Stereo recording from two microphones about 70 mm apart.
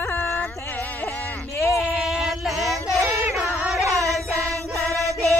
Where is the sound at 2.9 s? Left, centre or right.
Right.